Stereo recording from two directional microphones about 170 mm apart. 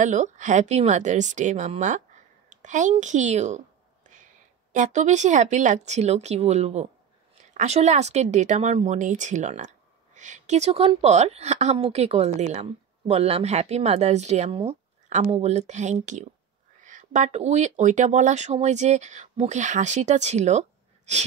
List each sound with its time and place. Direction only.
0.0 s speech: 45° right (ahead or behind)
2.5 s a sound: 45° right (ahead or behind)
4.7 s speech: 45° right (ahead or behind)